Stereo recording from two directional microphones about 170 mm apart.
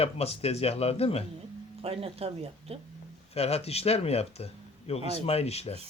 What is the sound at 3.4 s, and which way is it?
Speech, 35° left (ahead or behind).